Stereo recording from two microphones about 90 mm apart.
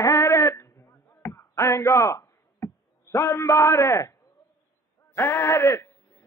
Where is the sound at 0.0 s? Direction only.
35° left (ahead or behind).